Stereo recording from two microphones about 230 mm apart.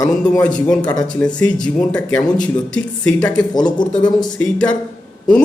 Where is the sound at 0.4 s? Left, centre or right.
Centre.